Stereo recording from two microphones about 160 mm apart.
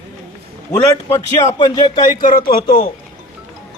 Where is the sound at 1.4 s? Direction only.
25° left (ahead or behind).